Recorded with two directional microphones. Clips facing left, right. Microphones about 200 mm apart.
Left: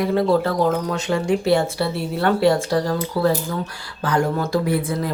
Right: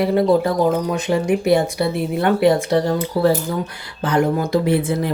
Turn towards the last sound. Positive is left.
turn(degrees=-25)  # may be behind; listen again after turning